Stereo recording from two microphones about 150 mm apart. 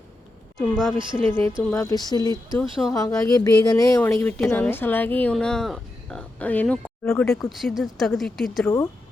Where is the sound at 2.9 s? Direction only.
25° left (ahead or behind).